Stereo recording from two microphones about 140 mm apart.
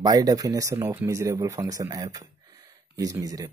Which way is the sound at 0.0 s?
25° right (ahead or behind).